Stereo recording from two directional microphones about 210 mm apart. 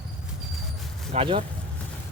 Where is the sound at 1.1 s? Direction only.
25° right (ahead or behind).